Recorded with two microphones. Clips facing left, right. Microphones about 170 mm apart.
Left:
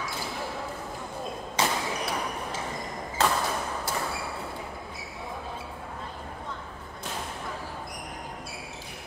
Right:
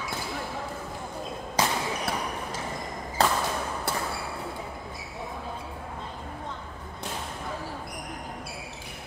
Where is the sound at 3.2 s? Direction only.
35° right (ahead or behind).